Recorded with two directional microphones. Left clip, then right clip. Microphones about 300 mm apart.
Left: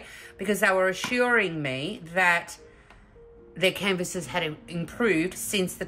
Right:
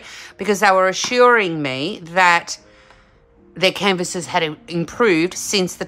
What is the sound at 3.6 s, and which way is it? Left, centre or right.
A woman's voice, centre.